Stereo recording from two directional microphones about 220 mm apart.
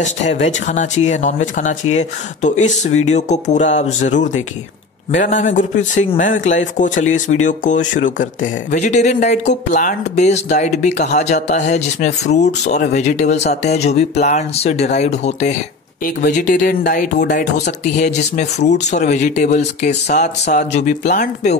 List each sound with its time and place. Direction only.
0.0 s speech: 30° left (ahead or behind)